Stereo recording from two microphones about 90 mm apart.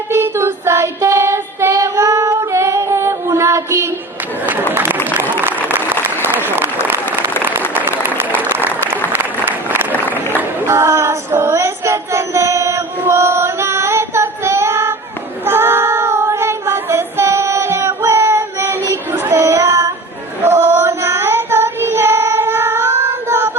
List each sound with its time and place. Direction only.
0.1 s child singing: 30° right (ahead or behind)
4.7 s a sound: 25° right (ahead or behind)
5.3 s applause: 20° right (ahead or behind)
8.4 s applause: 20° right (ahead or behind)
10.3 s child singing: 30° right (ahead or behind)